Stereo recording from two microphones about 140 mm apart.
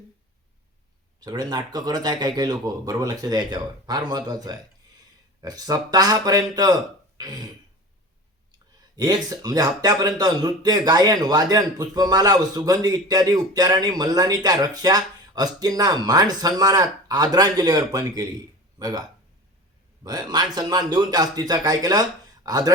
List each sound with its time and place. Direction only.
1.2 s speech: 30° right (ahead or behind)
8.5 s speech: 30° right (ahead or behind)
20.1 s speech: 30° right (ahead or behind)